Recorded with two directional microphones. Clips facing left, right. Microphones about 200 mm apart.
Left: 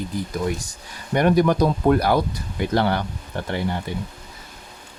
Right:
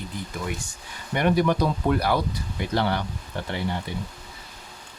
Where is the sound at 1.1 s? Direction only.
45° left (ahead or behind).